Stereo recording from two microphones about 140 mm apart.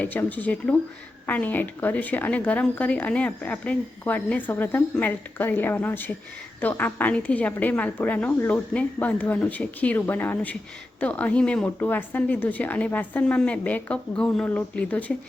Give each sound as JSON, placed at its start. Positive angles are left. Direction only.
{"t": 0.0, "sound": "speech", "side_deg": 10}